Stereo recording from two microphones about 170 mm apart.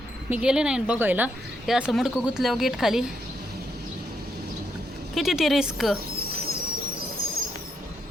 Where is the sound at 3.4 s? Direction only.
70° right (ahead or behind).